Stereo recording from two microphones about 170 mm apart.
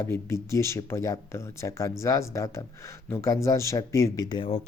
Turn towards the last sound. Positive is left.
turn(degrees=30)  # may be behind; listen again after turning